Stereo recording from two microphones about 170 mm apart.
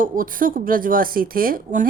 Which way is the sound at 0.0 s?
55° right (ahead or behind).